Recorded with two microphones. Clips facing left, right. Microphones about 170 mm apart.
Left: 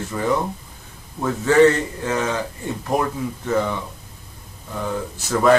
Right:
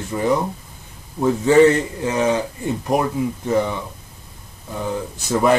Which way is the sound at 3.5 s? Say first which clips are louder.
Right 1 dB; 20° right (ahead or behind).